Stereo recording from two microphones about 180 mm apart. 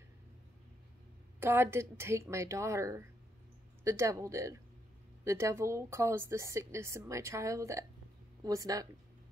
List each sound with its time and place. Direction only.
1.4 s a woman's voice: 15° right (ahead or behind)